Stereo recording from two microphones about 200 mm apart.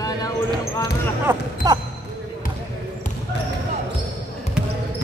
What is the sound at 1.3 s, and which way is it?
Music, 10° right (ahead or behind).